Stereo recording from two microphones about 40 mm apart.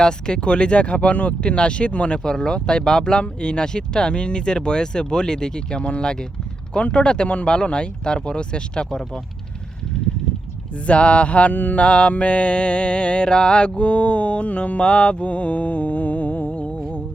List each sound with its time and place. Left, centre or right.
0.0 s speech: centre
10.8 s a sound: left
11.5 s mantra: left
11.8 s speech: left
15.2 s music: left